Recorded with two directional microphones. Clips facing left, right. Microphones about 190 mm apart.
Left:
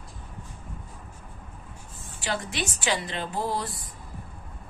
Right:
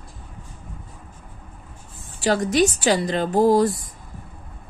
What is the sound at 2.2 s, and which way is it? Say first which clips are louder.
A woman's voice: right 12 dB; 40° right (ahead or behind).